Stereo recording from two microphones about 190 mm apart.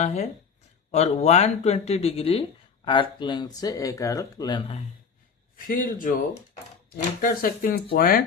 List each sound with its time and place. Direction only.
0.0 s speech: 35° left (ahead or behind)
5.5 s speech: 45° left (ahead or behind)